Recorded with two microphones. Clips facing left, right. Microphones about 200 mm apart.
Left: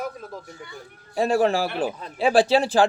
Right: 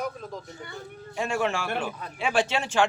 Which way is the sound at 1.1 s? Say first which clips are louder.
Left 7 dB; 35° left (ahead or behind).